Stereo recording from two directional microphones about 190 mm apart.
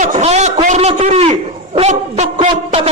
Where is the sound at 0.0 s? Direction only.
40° right (ahead or behind).